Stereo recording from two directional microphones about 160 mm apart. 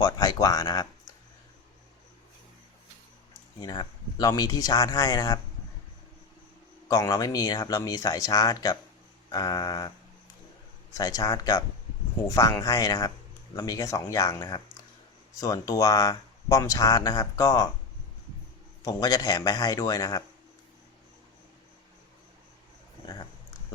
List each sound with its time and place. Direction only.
0.0 s speech: 20° left (ahead or behind)
3.6 s speech: 25° left (ahead or behind)
6.8 s speech: 20° left (ahead or behind)
10.9 s speech: 20° left (ahead or behind)
18.8 s speech: 25° left (ahead or behind)